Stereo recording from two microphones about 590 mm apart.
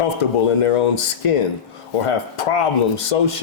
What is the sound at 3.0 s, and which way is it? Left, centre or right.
Speech, left.